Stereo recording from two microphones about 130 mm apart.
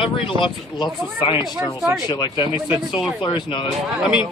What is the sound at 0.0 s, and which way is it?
Speech, 40° left (ahead or behind).